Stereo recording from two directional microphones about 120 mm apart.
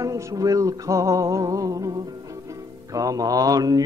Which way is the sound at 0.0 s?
30° right (ahead or behind).